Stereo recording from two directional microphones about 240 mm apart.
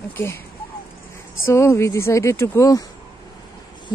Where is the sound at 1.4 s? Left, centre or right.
Centre.